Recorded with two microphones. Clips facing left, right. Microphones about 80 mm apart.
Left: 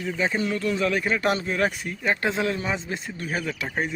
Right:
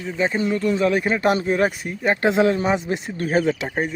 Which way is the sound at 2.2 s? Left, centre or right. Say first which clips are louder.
Right 12 dB; right.